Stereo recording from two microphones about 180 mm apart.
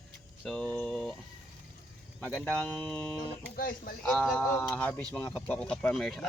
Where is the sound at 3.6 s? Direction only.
50° left (ahead or behind).